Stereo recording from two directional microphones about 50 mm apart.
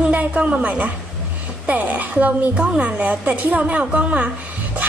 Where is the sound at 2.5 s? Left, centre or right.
Centre.